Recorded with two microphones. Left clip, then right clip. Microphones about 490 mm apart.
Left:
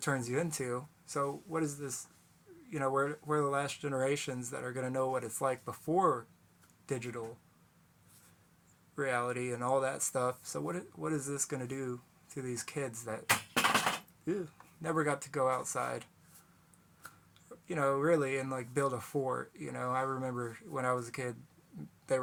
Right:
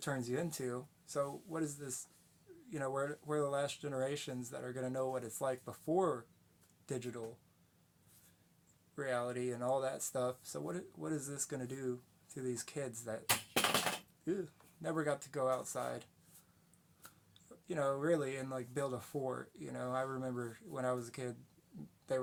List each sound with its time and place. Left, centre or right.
0.0 s speech: right
9.0 s speech: right
14.3 s speech: right
17.0 s a sound: right
17.7 s speech: right